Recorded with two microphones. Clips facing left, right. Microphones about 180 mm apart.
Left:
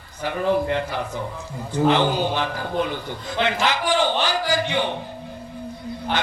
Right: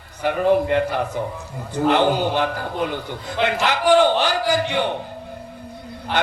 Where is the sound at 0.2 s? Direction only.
60° right (ahead or behind).